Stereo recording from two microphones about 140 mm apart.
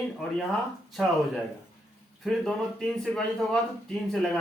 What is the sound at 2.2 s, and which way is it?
Speech, 5° left (ahead or behind).